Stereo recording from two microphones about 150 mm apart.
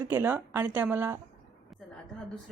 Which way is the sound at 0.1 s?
15° right (ahead or behind).